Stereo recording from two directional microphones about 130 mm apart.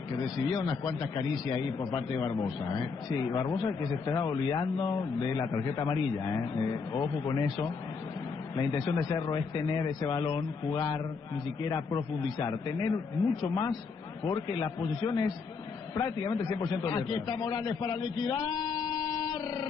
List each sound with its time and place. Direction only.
0.2 s a man's voice: 30° left (ahead or behind)
12.4 s a man's voice: 35° left (ahead or behind)